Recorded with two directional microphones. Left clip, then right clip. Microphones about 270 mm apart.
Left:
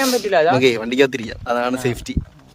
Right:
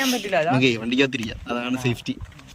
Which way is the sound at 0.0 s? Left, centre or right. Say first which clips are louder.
Left 6 dB; centre.